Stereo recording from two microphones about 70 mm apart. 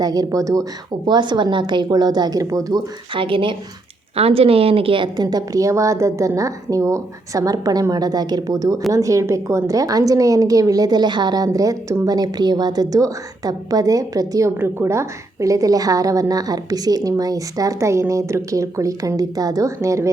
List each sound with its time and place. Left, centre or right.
0.0 s speech: right
1.0 s a woman's voice: right
5.1 s a woman's voice: right
8.9 s a woman's voice: right
11.4 s a woman's voice: right
12.0 s a woman's voice: right
14.6 s a woman's voice: right